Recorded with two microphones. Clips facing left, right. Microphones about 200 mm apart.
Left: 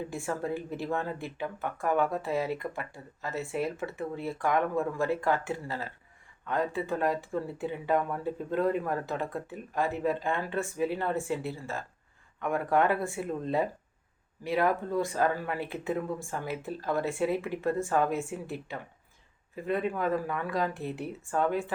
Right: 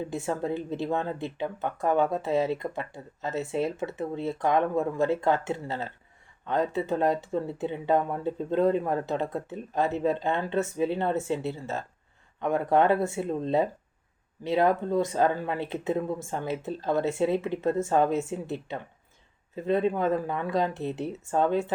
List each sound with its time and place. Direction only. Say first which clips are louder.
0.0 s speech: right 3 dB; 25° right (ahead or behind)